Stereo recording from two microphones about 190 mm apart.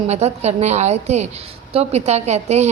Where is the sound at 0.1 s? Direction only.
35° right (ahead or behind).